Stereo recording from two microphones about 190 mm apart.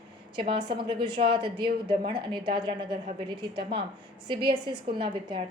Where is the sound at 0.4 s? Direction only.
25° right (ahead or behind).